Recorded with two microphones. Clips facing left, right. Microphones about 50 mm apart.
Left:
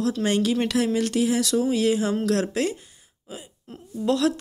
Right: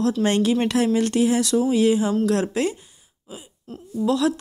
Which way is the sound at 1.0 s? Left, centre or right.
Right.